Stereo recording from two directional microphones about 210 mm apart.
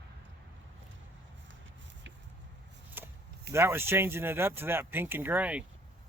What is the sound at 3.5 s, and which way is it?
Speech, 10° right (ahead or behind).